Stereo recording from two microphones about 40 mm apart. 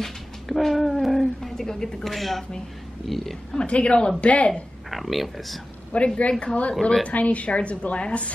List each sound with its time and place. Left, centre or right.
0.0 s speech: centre
3.5 s a woman's voice: left
4.9 s speech: centre
5.9 s a woman's voice: left
6.8 s a woman's voice: left
7.1 s a woman's voice: left